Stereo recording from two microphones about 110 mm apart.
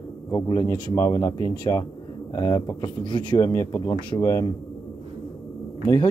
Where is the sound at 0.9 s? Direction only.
30° left (ahead or behind); by 3.4 s 45° left (ahead or behind).